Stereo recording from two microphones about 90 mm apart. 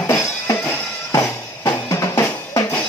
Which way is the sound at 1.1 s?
40° left (ahead or behind).